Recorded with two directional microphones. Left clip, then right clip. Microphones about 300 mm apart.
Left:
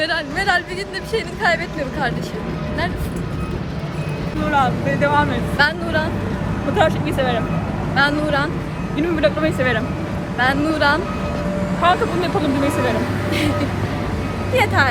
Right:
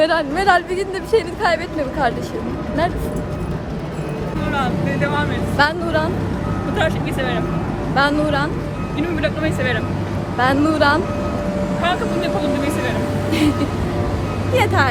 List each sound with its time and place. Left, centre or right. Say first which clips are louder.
0.0 s speech: right 4 dB; centre
4.5 s speech: left 4 dB; centre
5.5 s speech: right 1 dB; centre
6.7 s speech: left 4 dB; centre
7.9 s speech: even; centre
9.0 s speech: left 4 dB; centre
10.3 s speech: right 2 dB; centre
11.8 s speech: left 4 dB; centre
14.5 s speech: even; centre